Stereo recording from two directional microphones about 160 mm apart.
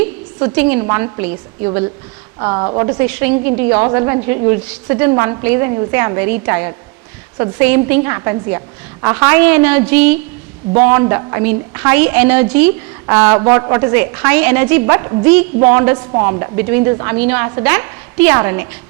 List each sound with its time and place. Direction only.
0.4 s a woman's voice: 10° right (ahead or behind)
2.4 s a woman's voice: 25° right (ahead or behind)